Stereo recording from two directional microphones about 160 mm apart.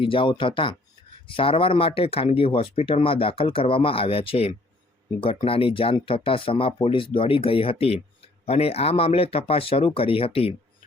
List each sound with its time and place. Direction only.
0.0 s speech: 30° left (ahead or behind)